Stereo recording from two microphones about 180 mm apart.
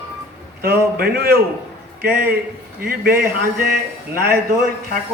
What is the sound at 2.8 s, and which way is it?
Speech, 55° right (ahead or behind).